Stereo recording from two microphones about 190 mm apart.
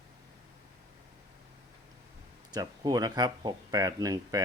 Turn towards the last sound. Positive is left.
turn(degrees=-20)  # may be behind; listen again after turning